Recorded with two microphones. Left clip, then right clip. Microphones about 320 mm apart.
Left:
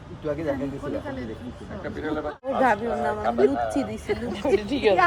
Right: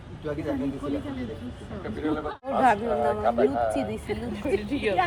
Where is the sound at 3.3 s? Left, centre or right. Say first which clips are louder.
Even; right.